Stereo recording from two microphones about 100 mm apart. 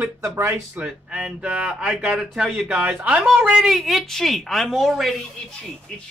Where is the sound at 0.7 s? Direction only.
10° right (ahead or behind).